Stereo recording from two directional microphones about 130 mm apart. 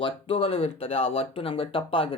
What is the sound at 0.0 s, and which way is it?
Speech, 45° left (ahead or behind).